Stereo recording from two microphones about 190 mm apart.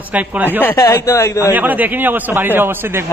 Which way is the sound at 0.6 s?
15° left (ahead or behind).